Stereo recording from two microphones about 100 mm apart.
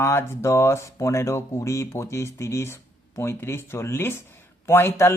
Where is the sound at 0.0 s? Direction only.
25° left (ahead or behind).